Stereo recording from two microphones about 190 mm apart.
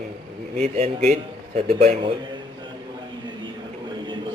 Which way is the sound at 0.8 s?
35° right (ahead or behind).